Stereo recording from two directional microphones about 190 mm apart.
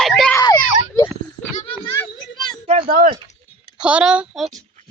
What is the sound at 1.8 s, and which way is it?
Children playing, 20° left (ahead or behind).